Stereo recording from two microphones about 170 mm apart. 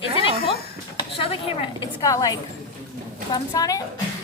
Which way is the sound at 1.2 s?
30° left (ahead or behind).